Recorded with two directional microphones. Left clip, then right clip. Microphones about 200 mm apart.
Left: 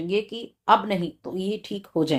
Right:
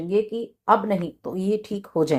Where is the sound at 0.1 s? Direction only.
15° right (ahead or behind).